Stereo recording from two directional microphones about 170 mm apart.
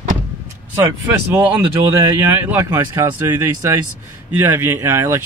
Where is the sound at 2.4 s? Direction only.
15° right (ahead or behind).